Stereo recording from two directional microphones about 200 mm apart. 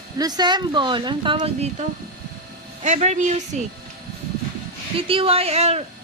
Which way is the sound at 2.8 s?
35° right (ahead or behind).